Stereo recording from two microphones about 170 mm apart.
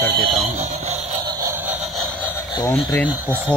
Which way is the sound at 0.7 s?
40° right (ahead or behind).